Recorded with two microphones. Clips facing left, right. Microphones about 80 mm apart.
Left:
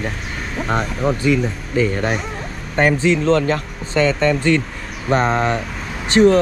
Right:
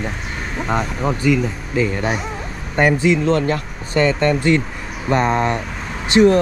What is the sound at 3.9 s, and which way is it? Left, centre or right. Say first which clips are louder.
Speech: even; right.